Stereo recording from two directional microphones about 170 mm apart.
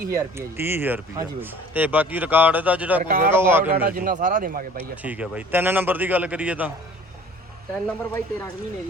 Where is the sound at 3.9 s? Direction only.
55° right (ahead or behind).